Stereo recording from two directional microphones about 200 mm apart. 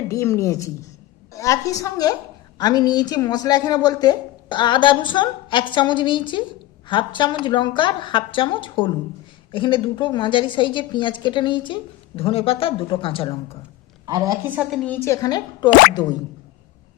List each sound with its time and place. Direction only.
0.1 s a woman's voice: 15° left (ahead or behind)
14.1 s speech: 15° right (ahead or behind); by 15.7 s 20° left (ahead or behind)